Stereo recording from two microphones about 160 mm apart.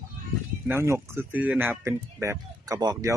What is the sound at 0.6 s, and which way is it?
Speech, 15° right (ahead or behind).